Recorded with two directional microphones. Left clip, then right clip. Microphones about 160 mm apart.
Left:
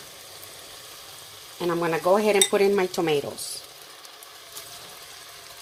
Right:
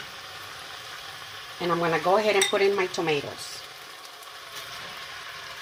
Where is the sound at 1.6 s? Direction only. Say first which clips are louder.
Left 1 dB; 50° left (ahead or behind).